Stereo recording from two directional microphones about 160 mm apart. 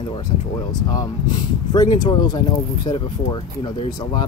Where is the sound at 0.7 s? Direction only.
25° left (ahead or behind).